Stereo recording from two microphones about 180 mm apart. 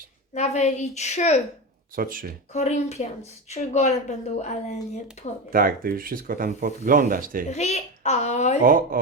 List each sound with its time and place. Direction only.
0.3 s a woman's voice: 40° left (ahead or behind)
2.0 s speech: 50° right (ahead or behind)
2.5 s a woman's voice: 40° left (ahead or behind)
5.5 s speech: 50° right (ahead or behind)
7.5 s a woman's voice: 40° left (ahead or behind)
8.6 s speech: 50° right (ahead or behind)